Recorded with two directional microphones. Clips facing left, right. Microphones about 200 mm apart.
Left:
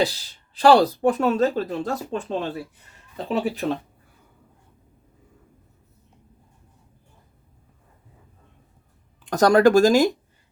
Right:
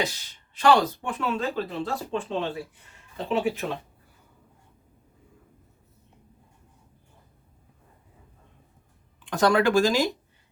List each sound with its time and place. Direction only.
0.0 s speech: 35° left (ahead or behind)
9.2 s speech: 40° left (ahead or behind)